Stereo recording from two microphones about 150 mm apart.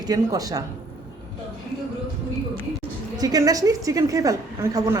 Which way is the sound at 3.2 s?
25° right (ahead or behind).